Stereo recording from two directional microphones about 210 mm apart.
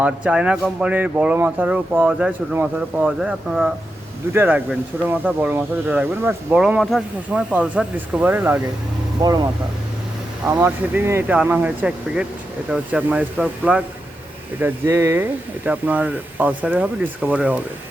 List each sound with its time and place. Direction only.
0.0 s speech: 5° right (ahead or behind)